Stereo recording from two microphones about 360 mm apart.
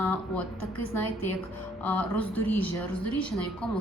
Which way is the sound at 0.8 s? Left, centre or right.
Left.